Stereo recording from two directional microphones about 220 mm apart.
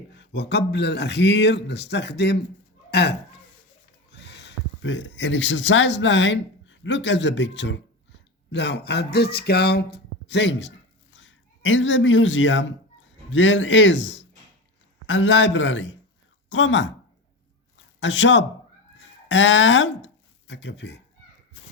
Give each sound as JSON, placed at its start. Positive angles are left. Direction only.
{"t": 0.1, "sound": "a man's voice", "side_deg": 50}
{"t": 18.0, "sound": "a man's voice", "side_deg": 55}